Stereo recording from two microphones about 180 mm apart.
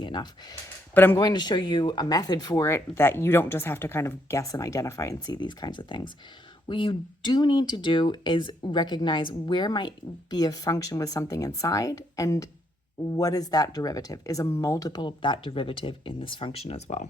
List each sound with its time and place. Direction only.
0.0 s speech: 25° left (ahead or behind)
0.9 s speech: 10° left (ahead or behind)
1.2 s speech: 25° left (ahead or behind)